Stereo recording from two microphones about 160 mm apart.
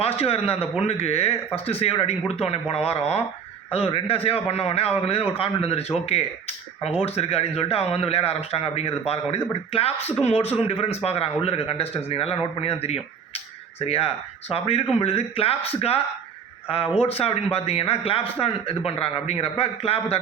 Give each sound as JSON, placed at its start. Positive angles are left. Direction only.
{"t": 0.2, "sound": "a man's voice", "side_deg": 40}
{"t": 7.0, "sound": "a man's voice", "side_deg": 40}